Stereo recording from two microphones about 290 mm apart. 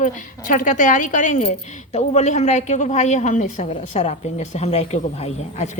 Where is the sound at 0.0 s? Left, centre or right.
Left.